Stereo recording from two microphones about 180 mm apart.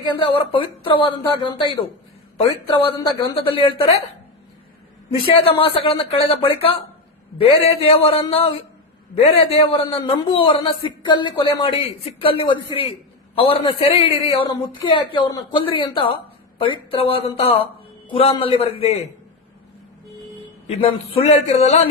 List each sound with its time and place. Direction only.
0.0 s a man's voice: 25° left (ahead or behind)
5.2 s a man's voice: 30° left (ahead or behind)
20.7 s a man's voice: 35° left (ahead or behind)